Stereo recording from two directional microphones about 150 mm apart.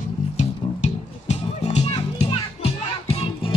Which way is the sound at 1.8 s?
40° left (ahead or behind).